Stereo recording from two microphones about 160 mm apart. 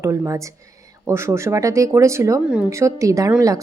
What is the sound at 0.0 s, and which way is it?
A woman's voice, 20° right (ahead or behind).